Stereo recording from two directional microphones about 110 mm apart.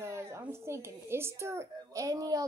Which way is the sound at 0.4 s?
25° right (ahead or behind).